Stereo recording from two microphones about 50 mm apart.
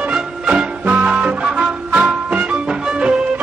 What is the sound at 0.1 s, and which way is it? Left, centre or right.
Music, right.